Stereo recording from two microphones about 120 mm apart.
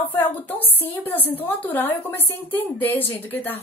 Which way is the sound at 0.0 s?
15° left (ahead or behind).